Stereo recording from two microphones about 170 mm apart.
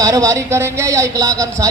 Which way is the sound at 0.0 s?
20° right (ahead or behind).